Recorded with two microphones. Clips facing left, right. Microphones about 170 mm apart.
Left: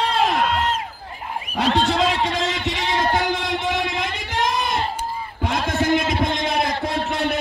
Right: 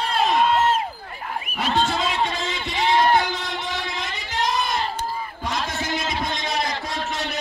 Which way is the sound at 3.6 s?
55° left (ahead or behind).